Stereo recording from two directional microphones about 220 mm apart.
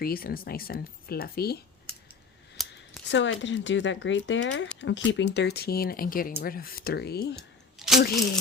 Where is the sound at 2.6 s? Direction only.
Centre (ahead or behind).